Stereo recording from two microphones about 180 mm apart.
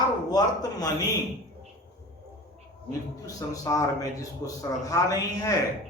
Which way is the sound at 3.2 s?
20° left (ahead or behind).